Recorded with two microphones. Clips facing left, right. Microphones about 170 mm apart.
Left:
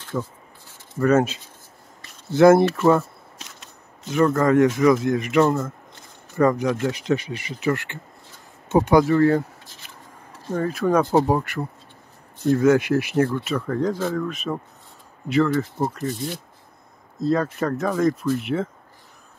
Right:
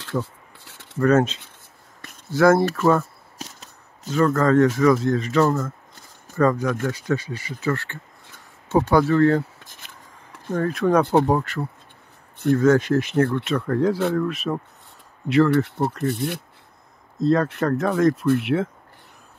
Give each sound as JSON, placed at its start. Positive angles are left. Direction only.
{"t": 0.9, "sound": "speech", "side_deg": 5}
{"t": 2.3, "sound": "speech", "side_deg": 20}
{"t": 2.7, "sound": "speech", "side_deg": 10}
{"t": 3.3, "sound": "a sound", "side_deg": -40}
{"t": 4.1, "sound": "speech", "side_deg": 15}
{"t": 10.5, "sound": "speech", "side_deg": 5}
{"t": 15.5, "sound": "speech", "side_deg": -65}
{"t": 17.2, "sound": "speech", "side_deg": 0}